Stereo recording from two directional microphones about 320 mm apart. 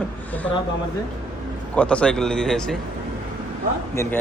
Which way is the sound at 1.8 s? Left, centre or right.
Centre.